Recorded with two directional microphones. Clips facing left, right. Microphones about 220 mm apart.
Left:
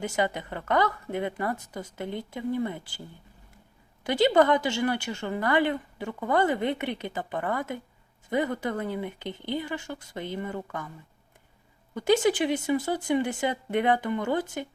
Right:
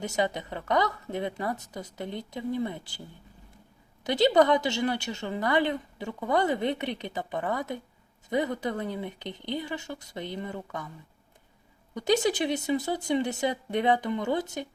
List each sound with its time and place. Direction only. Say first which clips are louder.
0.0 s a woman's voice: left 1 dB; 20° right (ahead or behind)
4.0 s a woman's voice: even; 20° right (ahead or behind)
11.9 s a woman's voice: left 2 dB; 20° right (ahead or behind)